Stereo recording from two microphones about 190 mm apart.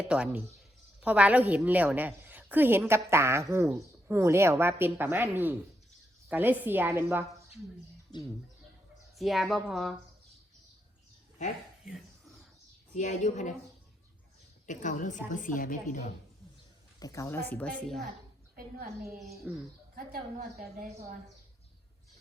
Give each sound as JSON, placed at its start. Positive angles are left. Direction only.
{"t": 0.1, "sound": "a woman's voice", "side_deg": -5}
{"t": 9.1, "sound": "a woman's voice", "side_deg": 0}
{"t": 11.9, "sound": "whispering", "side_deg": 0}
{"t": 13.0, "sound": "a woman's voice", "side_deg": 40}
{"t": 14.7, "sound": "a woman's voice", "side_deg": 40}
{"t": 17.0, "sound": "a woman's voice", "side_deg": 15}
{"t": 19.5, "sound": "a woman's voice", "side_deg": -5}
{"t": 20.0, "sound": "a woman's voice", "side_deg": -50}